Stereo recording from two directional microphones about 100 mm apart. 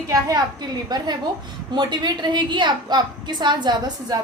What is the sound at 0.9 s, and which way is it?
A woman's voice, 45° right (ahead or behind).